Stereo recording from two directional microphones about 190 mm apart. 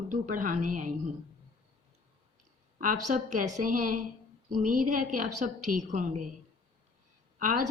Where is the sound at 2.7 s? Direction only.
45° right (ahead or behind).